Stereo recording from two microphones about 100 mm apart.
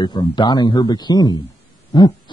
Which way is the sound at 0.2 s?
45° left (ahead or behind).